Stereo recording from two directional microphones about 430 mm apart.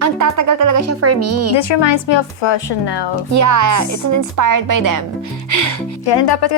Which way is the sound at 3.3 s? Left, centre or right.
Right.